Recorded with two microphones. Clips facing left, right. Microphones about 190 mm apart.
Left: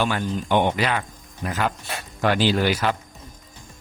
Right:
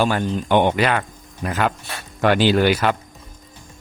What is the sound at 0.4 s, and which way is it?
Speech, 60° right (ahead or behind).